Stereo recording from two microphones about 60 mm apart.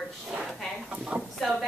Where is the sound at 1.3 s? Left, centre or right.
Centre.